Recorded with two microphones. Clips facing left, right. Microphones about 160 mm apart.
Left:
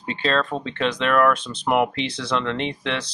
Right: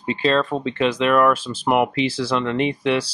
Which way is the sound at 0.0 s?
5° right (ahead or behind).